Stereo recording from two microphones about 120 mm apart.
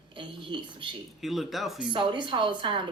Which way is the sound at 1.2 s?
Centre (ahead or behind).